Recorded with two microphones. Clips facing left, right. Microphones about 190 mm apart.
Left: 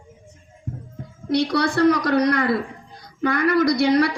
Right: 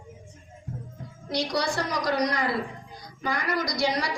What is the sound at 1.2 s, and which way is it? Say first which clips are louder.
A woman's voice: left 7 dB; 60° left (ahead or behind).